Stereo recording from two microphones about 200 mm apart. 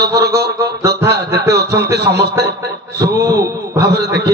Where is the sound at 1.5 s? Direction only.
55° right (ahead or behind).